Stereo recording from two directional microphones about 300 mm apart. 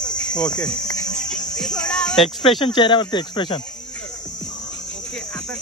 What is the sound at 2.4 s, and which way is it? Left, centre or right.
Speech, centre.